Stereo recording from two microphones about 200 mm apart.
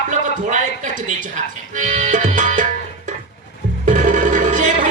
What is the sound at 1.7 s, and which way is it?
Music, 40° right (ahead or behind).